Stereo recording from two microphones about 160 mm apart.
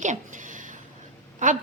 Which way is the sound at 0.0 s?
50° right (ahead or behind).